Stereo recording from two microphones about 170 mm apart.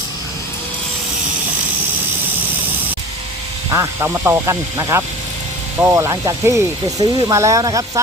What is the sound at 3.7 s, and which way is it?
Speech, 15° right (ahead or behind).